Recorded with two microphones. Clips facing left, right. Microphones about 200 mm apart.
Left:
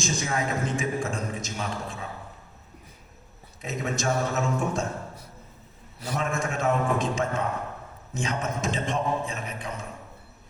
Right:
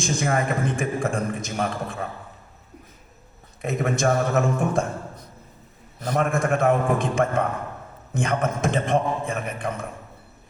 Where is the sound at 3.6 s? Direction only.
55° right (ahead or behind).